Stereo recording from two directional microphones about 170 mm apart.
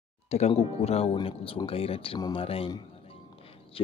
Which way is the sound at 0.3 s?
40° left (ahead or behind).